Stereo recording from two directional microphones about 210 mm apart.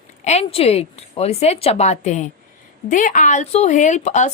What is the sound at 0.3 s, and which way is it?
Speech, 30° left (ahead or behind).